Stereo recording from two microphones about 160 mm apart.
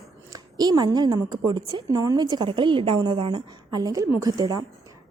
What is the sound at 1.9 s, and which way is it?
A woman's voice, 20° right (ahead or behind).